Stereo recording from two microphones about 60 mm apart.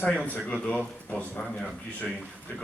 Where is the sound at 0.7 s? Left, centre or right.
Left.